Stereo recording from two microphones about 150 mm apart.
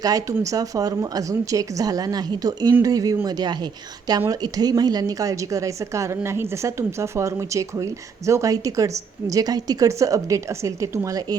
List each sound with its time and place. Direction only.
0.0 s a woman's voice: 25° right (ahead or behind)